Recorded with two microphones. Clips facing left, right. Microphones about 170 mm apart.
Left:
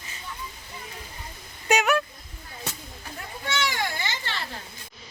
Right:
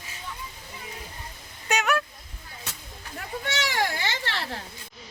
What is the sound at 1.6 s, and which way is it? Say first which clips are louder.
Vehicle: left 4 dB; 10° left (ahead or behind).